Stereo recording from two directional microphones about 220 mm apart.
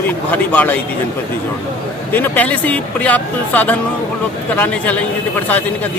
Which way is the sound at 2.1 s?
10° left (ahead or behind).